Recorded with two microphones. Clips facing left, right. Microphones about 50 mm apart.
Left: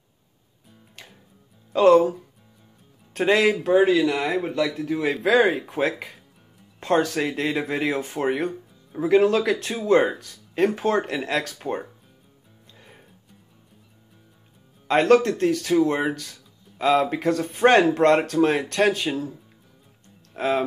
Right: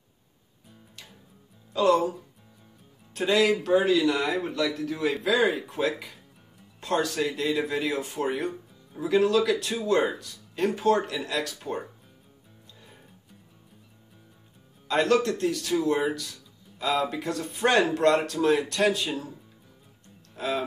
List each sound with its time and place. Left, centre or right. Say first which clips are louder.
1.7 s speech: left 6 dB; left
3.2 s speech: left 3 dB; left
3.4 s speech: left 4 dB; left
5.2 s speech: left 6 dB; left
14.9 s speech: left 6 dB; left
20.3 s speech: left 6 dB; left